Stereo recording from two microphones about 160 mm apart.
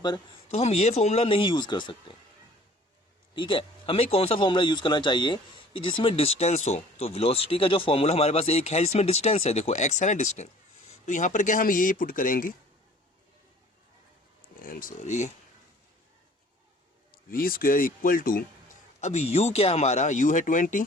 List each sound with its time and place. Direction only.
0.5 s speech: 40° left (ahead or behind)
3.3 s speech: 30° left (ahead or behind); by 12.5 s 60° left (ahead or behind)
14.4 s speech: 60° left (ahead or behind)
17.1 s speech: 65° left (ahead or behind)
18.9 s speech: 45° left (ahead or behind)